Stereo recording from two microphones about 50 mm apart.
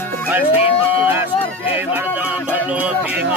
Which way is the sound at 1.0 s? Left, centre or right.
Right.